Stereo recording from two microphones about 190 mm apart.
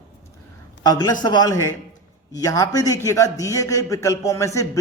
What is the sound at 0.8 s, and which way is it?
A man's voice, 20° left (ahead or behind).